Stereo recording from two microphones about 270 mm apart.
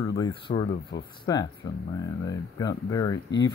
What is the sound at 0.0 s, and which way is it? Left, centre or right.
Speech, centre.